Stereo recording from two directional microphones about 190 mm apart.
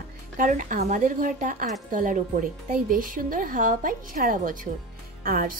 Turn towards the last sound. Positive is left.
turn(degrees=-50)  # may be behind; listen again after turning